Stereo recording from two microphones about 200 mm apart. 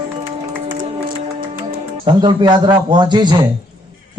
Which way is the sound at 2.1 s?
25° right (ahead or behind).